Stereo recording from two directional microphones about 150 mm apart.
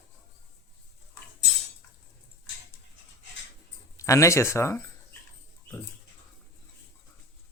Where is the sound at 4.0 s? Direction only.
20° left (ahead or behind).